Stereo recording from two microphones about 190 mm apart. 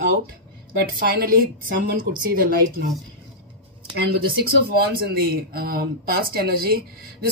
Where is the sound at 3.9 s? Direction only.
60° right (ahead or behind).